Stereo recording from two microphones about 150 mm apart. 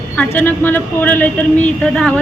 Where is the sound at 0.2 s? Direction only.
10° left (ahead or behind).